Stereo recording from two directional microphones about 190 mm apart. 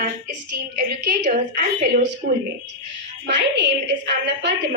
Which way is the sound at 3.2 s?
65° right (ahead or behind).